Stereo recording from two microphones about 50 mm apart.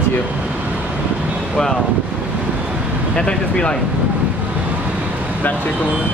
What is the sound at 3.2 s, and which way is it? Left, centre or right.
Speech, centre.